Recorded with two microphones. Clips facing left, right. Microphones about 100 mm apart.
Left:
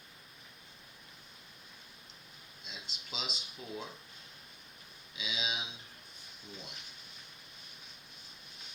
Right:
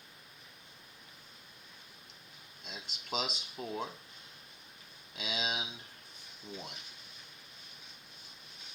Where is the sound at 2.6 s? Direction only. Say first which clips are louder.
Right 3 dB; 50° right (ahead or behind).